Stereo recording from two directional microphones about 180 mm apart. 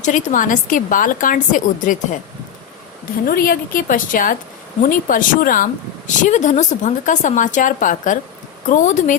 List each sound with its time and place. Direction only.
0.0 s a woman's voice: 45° left (ahead or behind)
3.2 s a woman's voice: 55° left (ahead or behind)